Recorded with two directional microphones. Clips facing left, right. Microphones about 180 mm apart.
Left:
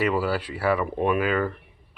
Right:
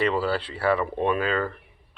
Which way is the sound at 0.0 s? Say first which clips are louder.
Even; 10° left (ahead or behind).